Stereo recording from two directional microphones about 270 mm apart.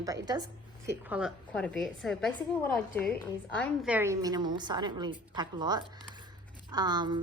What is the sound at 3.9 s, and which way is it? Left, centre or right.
A woman's voice, centre.